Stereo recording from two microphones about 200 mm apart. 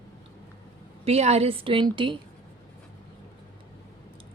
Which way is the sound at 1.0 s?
30° right (ahead or behind).